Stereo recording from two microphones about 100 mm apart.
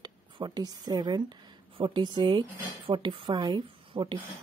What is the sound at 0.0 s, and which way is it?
A woman's voice, 45° right (ahead or behind).